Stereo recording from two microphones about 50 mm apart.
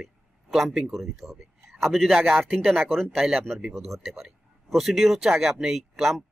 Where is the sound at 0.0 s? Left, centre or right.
Centre.